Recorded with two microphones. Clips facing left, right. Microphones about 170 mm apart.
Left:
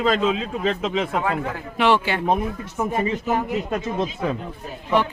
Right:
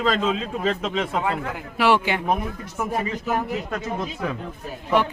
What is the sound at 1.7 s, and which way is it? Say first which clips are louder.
Speech: even; 10° right (ahead or behind).